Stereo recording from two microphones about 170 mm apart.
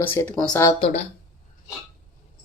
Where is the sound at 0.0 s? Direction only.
10° left (ahead or behind).